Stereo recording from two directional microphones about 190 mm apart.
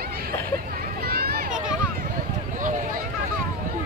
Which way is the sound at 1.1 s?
55° right (ahead or behind).